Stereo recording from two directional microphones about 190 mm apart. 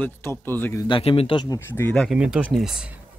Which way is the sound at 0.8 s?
30° left (ahead or behind).